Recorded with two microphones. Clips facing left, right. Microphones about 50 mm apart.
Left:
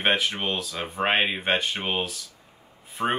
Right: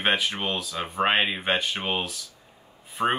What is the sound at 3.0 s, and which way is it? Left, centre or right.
Speech, centre.